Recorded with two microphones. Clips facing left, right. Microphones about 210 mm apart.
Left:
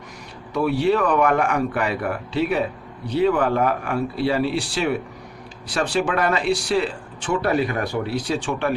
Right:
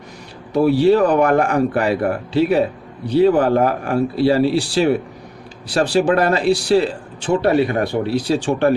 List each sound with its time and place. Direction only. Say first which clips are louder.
0.5 s speech: right 6 dB; 35° right (ahead or behind)